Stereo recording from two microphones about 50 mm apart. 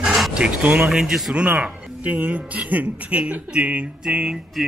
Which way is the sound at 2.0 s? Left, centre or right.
Right.